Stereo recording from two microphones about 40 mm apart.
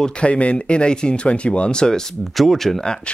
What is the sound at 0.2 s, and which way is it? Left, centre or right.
Speech, left.